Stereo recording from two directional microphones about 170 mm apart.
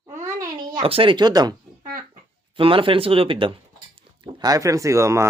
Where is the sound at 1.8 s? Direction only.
50° right (ahead or behind).